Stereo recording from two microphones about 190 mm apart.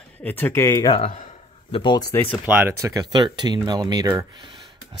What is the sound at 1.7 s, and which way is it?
Speech, 25° left (ahead or behind).